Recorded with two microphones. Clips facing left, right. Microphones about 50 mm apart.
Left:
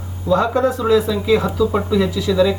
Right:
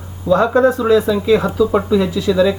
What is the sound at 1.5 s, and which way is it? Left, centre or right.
Speech, centre.